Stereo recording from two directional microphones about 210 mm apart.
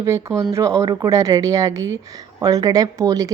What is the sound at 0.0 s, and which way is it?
A woman's voice, 15° right (ahead or behind).